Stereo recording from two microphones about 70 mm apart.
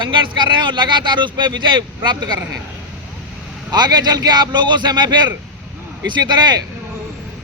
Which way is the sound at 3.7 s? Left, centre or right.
Right.